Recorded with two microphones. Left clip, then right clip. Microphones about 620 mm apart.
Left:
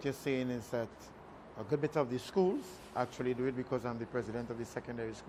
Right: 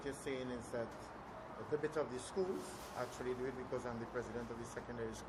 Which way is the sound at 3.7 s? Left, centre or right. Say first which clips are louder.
Left 5 dB; left.